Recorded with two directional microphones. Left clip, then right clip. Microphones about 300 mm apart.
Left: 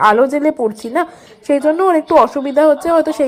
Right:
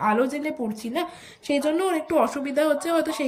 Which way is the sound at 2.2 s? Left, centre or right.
Centre.